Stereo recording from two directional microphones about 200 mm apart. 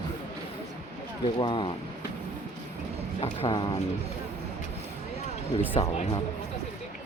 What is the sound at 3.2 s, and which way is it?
Speech, 25° left (ahead or behind).